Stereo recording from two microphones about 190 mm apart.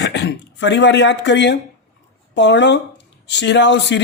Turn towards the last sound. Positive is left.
turn(degrees=65)  # may be behind; listen again after turning